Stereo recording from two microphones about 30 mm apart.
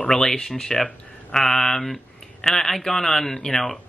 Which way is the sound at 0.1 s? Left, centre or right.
Centre.